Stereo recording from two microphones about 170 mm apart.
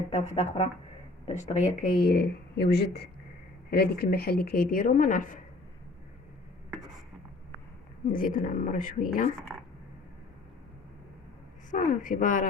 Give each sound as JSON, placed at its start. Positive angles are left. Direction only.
{"t": 0.3, "sound": "speech", "side_deg": 45}
{"t": 8.1, "sound": "speech", "side_deg": 55}
{"t": 11.7, "sound": "speech", "side_deg": 50}